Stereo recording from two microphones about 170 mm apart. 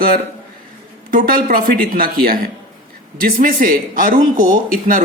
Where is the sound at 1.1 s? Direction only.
55° right (ahead or behind).